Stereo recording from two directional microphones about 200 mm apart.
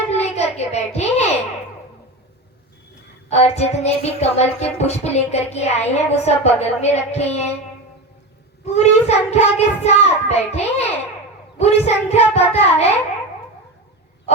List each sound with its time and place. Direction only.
0.1 s a sound: 35° left (ahead or behind)
3.2 s music: 35° left (ahead or behind)
8.6 s music: 35° left (ahead or behind)